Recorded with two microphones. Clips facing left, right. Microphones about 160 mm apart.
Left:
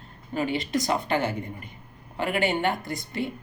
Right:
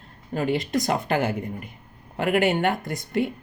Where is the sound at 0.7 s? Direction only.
50° right (ahead or behind).